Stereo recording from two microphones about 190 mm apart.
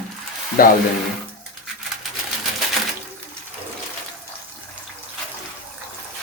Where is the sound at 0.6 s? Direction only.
50° left (ahead or behind).